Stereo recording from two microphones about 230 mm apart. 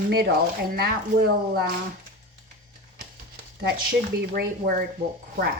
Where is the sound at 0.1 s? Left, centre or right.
Right.